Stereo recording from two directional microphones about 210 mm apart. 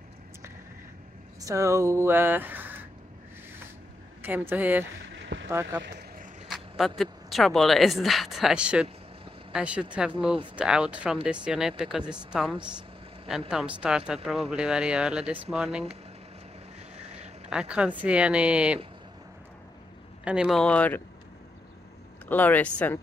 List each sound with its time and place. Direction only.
1.4 s speech: 15° right (ahead or behind)
4.2 s speech: 10° right (ahead or behind)
5.1 s a sound: 60° right (ahead or behind)
5.5 s speech: 10° right (ahead or behind)
7.0 s speech: centre (ahead or behind)
17.5 s speech: 5° right (ahead or behind)
20.2 s speech: 5° right (ahead or behind)
22.3 s speech: 10° left (ahead or behind)